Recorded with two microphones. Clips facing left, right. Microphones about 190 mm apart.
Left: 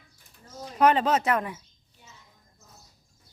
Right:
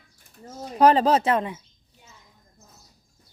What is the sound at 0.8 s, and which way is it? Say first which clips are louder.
Speech: right 4 dB; 35° right (ahead or behind).